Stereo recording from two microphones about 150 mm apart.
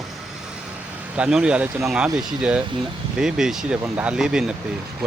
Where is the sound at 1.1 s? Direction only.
5° right (ahead or behind).